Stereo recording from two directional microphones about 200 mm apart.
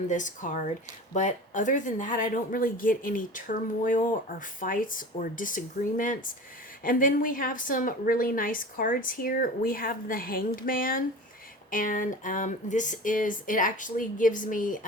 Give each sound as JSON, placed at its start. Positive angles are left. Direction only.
{"t": 0.1, "sound": "speech", "side_deg": 40}